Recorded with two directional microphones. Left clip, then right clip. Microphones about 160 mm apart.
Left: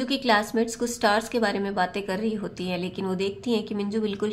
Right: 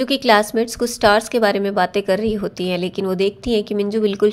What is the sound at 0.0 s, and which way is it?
A woman's voice, 40° right (ahead or behind).